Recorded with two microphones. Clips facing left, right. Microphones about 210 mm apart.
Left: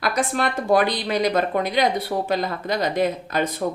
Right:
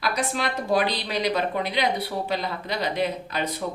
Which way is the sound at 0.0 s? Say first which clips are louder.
Left 4 dB; 50° left (ahead or behind).